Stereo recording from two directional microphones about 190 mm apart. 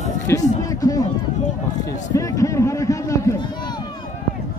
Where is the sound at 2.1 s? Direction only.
15° left (ahead or behind).